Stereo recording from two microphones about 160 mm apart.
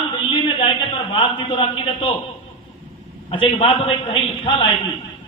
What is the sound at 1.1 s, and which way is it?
A man's voice, 30° left (ahead or behind).